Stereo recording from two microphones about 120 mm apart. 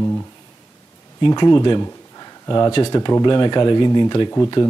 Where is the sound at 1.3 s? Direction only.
35° left (ahead or behind).